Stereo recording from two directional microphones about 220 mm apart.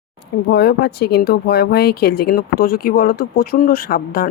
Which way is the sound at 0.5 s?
50° left (ahead or behind).